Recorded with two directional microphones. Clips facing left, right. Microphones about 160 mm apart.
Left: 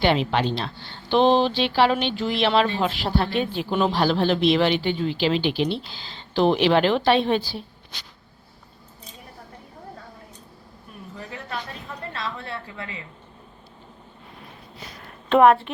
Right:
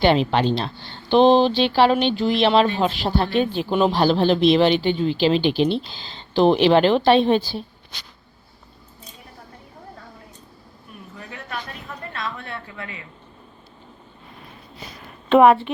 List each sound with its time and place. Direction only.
0.0 s speech: 30° right (ahead or behind)
11.2 s a sound: 30° left (ahead or behind)
12.1 s a woman's voice: 25° left (ahead or behind)
15.3 s speech: 5° right (ahead or behind)